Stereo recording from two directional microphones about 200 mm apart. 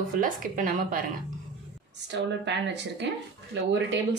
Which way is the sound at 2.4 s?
60° right (ahead or behind).